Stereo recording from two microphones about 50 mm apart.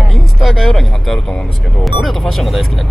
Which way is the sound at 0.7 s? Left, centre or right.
Centre.